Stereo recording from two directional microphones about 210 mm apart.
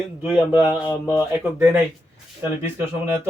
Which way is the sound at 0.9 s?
15° left (ahead or behind).